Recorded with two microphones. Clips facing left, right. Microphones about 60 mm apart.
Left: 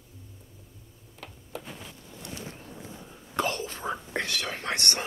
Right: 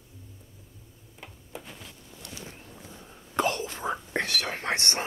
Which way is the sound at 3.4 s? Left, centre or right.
Right.